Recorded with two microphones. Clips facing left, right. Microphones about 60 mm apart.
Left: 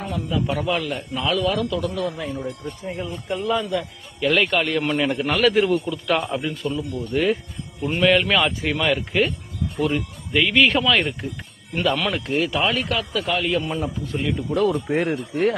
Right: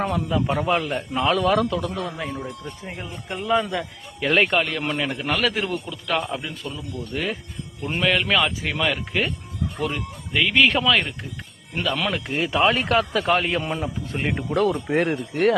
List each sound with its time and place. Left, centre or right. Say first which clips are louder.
0.0 s a man's voice: right 4 dB; right
0.3 s speech: left 2 dB; right
1.9 s speech: left 2 dB; right
4.6 s a man's voice: left 4 dB; centre
12.4 s speech: right 3 dB; right
14.9 s speech: even; right